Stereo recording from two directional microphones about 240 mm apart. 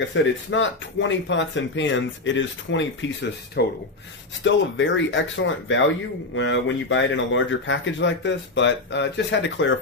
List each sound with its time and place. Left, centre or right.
0.1 s speech: left